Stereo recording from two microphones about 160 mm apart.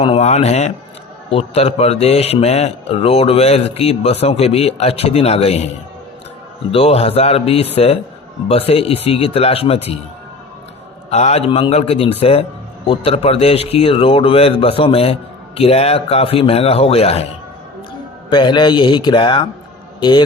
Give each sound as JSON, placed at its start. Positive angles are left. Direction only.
{"t": 0.0, "sound": "a man's voice", "side_deg": 40}
{"t": 6.7, "sound": "speech", "side_deg": 35}
{"t": 11.1, "sound": "speech", "side_deg": 40}
{"t": 18.3, "sound": "a man's voice", "side_deg": 30}